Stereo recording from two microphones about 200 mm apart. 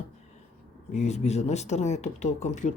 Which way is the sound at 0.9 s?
35° left (ahead or behind).